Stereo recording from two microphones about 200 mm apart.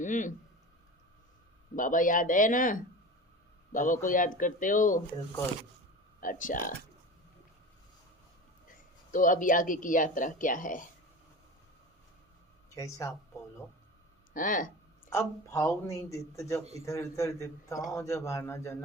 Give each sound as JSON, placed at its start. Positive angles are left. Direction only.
{"t": 0.0, "sound": "a man's voice", "side_deg": 40}
{"t": 1.7, "sound": "a man's voice", "side_deg": 40}
{"t": 6.1, "sound": "speech", "side_deg": 45}
{"t": 9.1, "sound": "speech", "side_deg": 40}
{"t": 12.7, "sound": "a man's voice", "side_deg": 15}
{"t": 14.3, "sound": "a sound", "side_deg": 40}
{"t": 15.1, "sound": "a man's voice", "side_deg": 15}